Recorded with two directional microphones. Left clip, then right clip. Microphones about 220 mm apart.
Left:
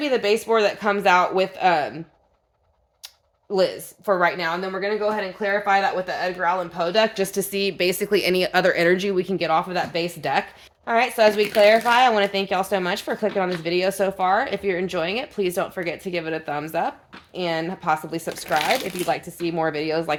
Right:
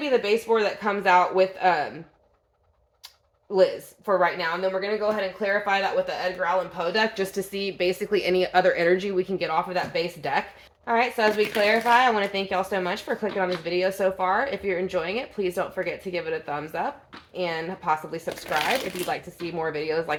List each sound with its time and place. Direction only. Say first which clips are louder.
0.0 s a woman's voice: left 2 dB; 50° left (ahead or behind)
3.5 s a woman's voice: even; 50° left (ahead or behind)